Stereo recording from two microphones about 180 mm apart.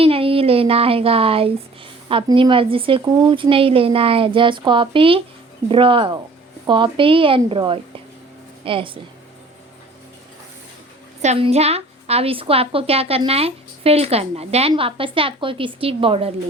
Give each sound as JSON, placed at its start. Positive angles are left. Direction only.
{"t": 0.0, "sound": "speech", "side_deg": -30}
{"t": 11.2, "sound": "a woman's voice", "side_deg": -35}